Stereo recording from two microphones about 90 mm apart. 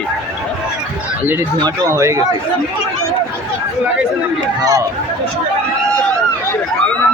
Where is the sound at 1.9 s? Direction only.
35° right (ahead or behind).